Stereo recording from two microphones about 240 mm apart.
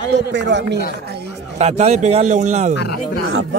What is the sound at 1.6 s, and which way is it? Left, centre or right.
Speech, right.